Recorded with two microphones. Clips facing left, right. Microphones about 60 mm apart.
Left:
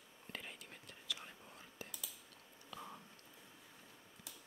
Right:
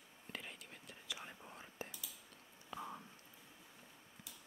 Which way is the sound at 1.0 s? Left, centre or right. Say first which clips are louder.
Left 1 dB; centre.